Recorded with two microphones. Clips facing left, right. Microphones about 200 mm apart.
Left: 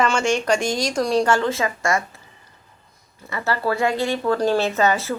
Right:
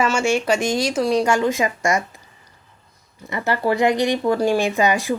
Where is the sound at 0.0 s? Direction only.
5° right (ahead or behind).